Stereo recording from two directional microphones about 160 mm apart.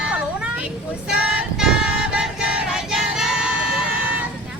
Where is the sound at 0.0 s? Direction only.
5° right (ahead or behind).